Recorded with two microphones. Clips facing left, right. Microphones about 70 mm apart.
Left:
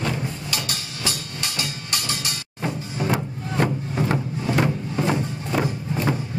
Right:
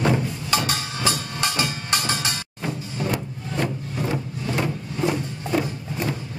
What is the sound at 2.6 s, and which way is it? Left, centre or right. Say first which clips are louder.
Music: left 3 dB; left.